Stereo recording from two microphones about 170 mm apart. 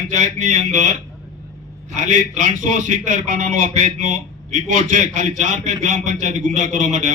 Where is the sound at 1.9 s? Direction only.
45° right (ahead or behind).